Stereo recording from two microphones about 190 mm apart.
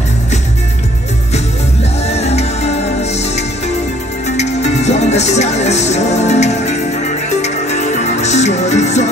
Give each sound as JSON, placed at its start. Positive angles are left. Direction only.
{"t": 2.0, "sound": "music", "side_deg": 35}